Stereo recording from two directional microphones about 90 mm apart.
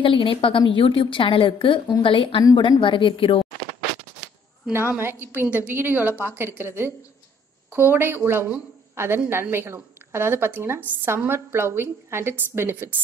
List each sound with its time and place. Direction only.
0.0 s a woman's voice: 75° left (ahead or behind)
4.7 s a woman's voice: 25° right (ahead or behind)